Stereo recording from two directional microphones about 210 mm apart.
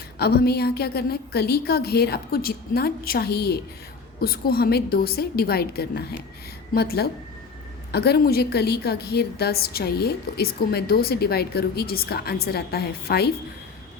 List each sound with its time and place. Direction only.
0.2 s a woman's voice: 50° left (ahead or behind)